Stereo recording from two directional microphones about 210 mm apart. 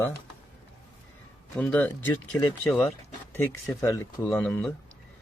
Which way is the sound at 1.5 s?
5° left (ahead or behind).